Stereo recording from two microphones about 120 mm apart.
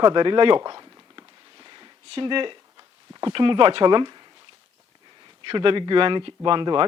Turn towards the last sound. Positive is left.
turn(degrees=-40)  # may be behind; listen again after turning